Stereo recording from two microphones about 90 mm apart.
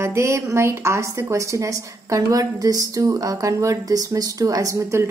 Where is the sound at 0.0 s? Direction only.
35° right (ahead or behind).